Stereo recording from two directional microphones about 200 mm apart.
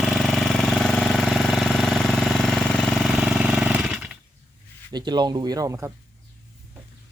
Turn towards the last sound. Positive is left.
turn(degrees=-15)  # may be behind; listen again after turning